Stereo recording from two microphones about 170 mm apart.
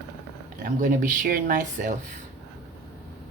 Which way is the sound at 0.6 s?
50° right (ahead or behind).